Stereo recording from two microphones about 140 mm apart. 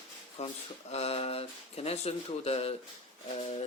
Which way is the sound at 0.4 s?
50° left (ahead or behind).